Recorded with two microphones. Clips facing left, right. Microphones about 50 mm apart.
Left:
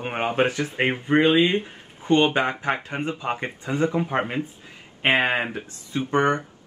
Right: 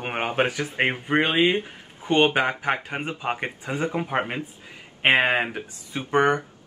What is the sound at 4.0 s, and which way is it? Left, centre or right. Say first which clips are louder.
Speech: left 1 dB; centre.